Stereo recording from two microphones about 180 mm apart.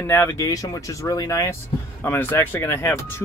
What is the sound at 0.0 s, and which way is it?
Speech, 10° left (ahead or behind).